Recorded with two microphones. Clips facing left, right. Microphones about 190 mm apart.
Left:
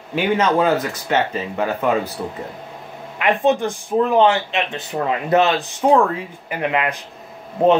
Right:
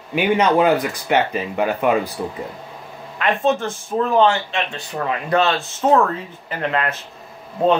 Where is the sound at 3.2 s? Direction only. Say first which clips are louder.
Left 2 dB; 15° left (ahead or behind).